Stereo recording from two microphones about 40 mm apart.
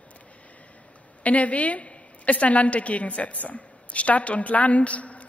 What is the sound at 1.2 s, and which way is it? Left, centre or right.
A woman's voice, left.